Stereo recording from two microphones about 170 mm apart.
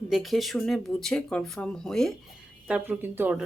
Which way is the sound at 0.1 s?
Centre (ahead or behind).